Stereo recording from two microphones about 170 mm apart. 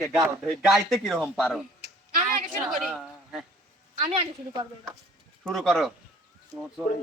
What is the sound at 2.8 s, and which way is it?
Speech, 5° right (ahead or behind).